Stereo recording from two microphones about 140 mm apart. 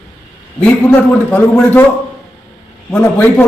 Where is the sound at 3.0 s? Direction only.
15° left (ahead or behind).